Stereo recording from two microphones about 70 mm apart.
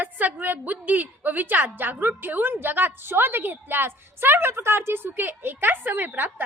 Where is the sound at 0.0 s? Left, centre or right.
Right.